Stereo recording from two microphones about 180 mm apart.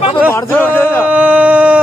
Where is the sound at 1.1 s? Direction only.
10° right (ahead or behind).